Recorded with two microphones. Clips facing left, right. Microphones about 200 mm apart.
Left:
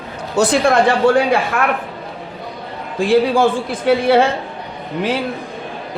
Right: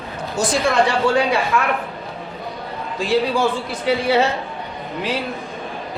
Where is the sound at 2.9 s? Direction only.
50° left (ahead or behind).